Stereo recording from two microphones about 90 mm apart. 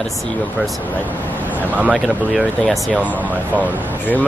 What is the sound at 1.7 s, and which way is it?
Speech, 15° right (ahead or behind).